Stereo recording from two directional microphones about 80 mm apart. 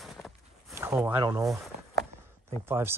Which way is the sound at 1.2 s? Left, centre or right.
Right.